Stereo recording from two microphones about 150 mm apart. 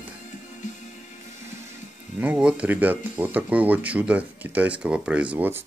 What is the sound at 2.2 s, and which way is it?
Speech, 10° right (ahead or behind).